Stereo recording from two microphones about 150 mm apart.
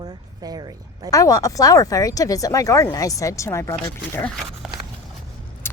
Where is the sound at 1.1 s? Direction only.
20° left (ahead or behind).